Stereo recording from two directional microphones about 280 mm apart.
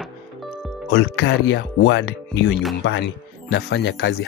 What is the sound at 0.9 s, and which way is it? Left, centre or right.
Speech, left.